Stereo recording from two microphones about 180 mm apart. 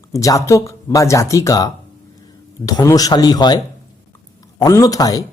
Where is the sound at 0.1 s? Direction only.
15° left (ahead or behind).